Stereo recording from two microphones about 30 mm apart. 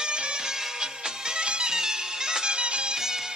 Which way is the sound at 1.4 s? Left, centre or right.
Right.